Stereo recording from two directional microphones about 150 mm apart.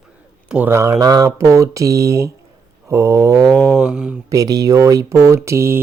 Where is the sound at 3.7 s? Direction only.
5° right (ahead or behind).